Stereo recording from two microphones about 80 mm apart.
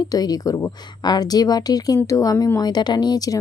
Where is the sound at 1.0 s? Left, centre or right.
Left.